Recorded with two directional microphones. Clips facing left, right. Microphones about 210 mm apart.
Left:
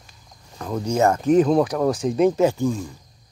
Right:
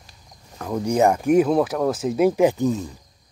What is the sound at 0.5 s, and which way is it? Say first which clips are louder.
Speech: right 1 dB; 10° right (ahead or behind).